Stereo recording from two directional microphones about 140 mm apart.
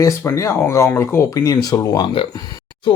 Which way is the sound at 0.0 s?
20° left (ahead or behind).